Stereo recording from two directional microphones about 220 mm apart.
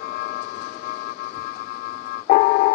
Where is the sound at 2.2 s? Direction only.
45° left (ahead or behind).